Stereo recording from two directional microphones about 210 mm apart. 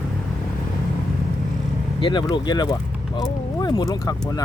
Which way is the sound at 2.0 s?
20° left (ahead or behind).